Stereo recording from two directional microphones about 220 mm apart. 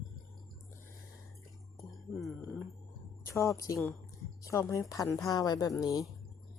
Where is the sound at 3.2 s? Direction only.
15° left (ahead or behind).